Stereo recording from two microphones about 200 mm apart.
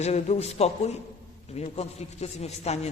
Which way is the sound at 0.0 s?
35° left (ahead or behind).